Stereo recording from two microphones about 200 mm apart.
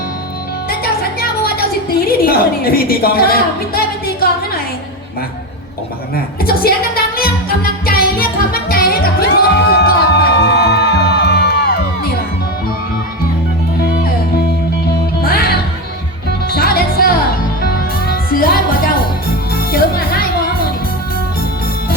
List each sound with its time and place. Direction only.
1.4 s a woman's voice: 50° left (ahead or behind)
6.4 s music: 50° left (ahead or behind)
15.2 s music: 50° left (ahead or behind)
18.3 s music: 50° left (ahead or behind)
19.7 s music: 50° left (ahead or behind)